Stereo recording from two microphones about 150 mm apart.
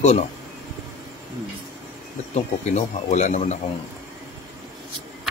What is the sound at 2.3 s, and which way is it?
A man's voice, 50° left (ahead or behind).